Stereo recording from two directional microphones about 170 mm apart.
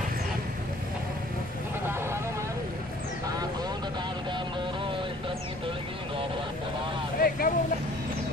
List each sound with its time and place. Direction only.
7.2 s vehicle: 60° left (ahead or behind)